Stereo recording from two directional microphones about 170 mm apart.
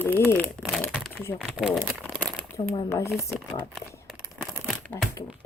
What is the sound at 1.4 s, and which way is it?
Speech, 5° right (ahead or behind).